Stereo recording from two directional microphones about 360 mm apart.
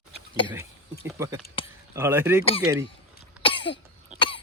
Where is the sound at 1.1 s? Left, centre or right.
Centre.